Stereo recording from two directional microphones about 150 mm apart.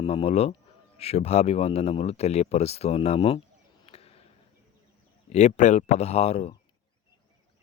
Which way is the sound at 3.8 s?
40° left (ahead or behind).